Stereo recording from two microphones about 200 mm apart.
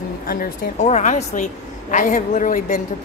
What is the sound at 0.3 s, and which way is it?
A woman's voice, 40° left (ahead or behind).